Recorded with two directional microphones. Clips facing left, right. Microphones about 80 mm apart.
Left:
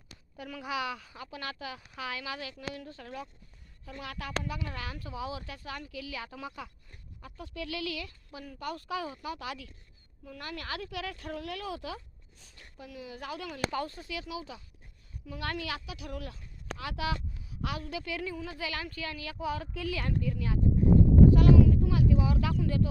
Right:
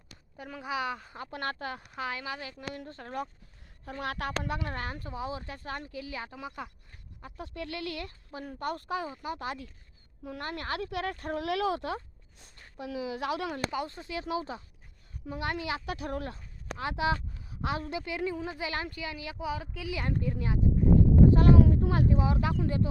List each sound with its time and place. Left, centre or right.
0.3 s speech: right
2.0 s speech: right
3.8 s speech: right
7.3 s speech: right
11.3 s speech: right
13.7 s speech: centre
13.9 s speech: right
14.3 s speech: right
15.4 s speech: right
15.9 s speech: right; by 20.0 s centre
20.0 s speech: right
21.2 s a sound: right
21.6 s speech: right